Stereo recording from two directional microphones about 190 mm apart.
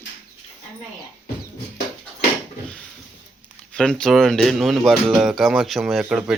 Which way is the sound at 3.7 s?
5° left (ahead or behind).